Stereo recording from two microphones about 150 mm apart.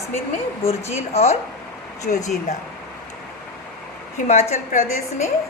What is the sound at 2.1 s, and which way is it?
Speech, 70° left (ahead or behind).